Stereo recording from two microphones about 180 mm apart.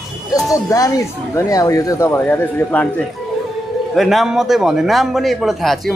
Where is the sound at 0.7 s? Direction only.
20° left (ahead or behind).